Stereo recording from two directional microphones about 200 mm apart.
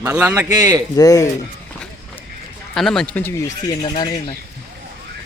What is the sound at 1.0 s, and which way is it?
Speech, 15° left (ahead or behind).